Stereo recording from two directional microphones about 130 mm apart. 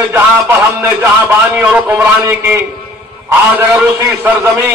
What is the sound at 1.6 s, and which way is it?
A man's voice, 15° right (ahead or behind).